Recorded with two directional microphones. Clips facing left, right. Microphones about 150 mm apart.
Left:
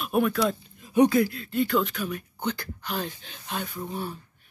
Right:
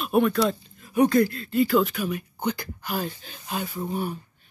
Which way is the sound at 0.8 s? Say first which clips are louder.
Left 1 dB; 20° left (ahead or behind).